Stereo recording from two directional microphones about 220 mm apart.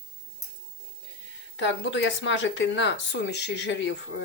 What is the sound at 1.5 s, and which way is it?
Speech, 55° left (ahead or behind).